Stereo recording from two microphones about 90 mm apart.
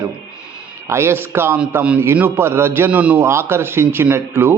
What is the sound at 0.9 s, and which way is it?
Speech, 30° right (ahead or behind).